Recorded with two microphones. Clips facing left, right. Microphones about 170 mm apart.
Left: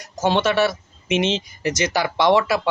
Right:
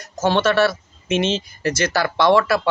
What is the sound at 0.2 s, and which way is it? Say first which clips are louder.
Speech: right 1 dB; 15° left (ahead or behind).